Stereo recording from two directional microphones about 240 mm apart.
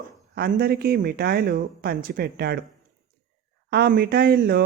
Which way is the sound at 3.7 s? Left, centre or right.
Right.